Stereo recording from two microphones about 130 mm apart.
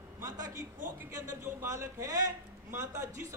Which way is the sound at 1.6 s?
20° right (ahead or behind).